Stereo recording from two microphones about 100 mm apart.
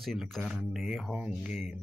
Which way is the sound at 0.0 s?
Centre (ahead or behind).